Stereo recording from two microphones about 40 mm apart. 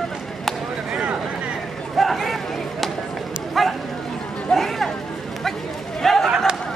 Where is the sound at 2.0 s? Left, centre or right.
Centre.